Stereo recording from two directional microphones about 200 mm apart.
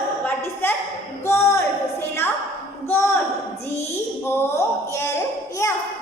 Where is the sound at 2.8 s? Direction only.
10° left (ahead or behind).